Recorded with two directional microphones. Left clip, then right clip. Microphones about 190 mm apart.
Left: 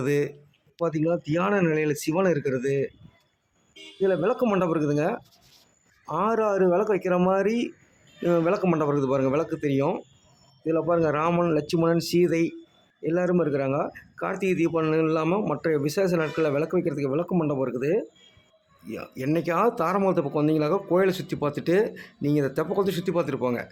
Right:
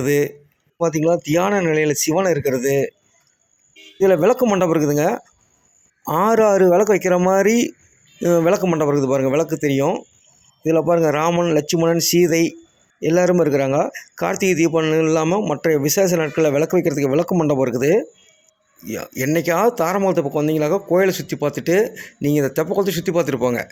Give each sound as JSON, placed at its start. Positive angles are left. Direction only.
{"t": 0.0, "sound": "speech", "side_deg": -20}
{"t": 4.0, "sound": "a man's voice", "side_deg": -25}